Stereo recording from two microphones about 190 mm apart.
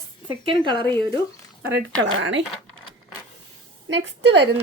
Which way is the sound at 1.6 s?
70° right (ahead or behind).